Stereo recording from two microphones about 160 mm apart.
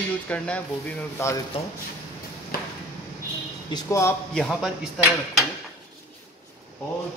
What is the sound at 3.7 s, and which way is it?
Speech, 20° left (ahead or behind).